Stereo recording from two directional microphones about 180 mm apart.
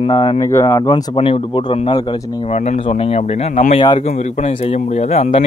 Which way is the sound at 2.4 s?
40° left (ahead or behind).